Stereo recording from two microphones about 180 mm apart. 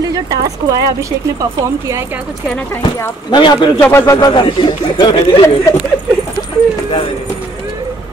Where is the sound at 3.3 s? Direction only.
25° left (ahead or behind).